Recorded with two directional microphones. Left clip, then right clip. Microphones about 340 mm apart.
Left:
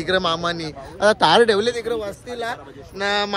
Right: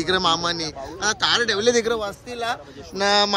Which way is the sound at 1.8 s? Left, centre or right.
Right.